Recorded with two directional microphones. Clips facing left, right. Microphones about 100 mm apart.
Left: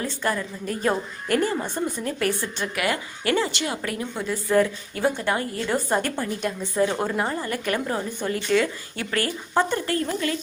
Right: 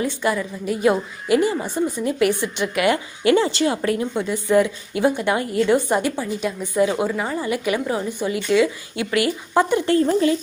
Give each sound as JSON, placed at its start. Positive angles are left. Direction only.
{"t": 0.0, "sound": "a woman's voice", "side_deg": -15}
{"t": 7.3, "sound": "a woman's voice", "side_deg": -10}
{"t": 9.8, "sound": "speech", "side_deg": -25}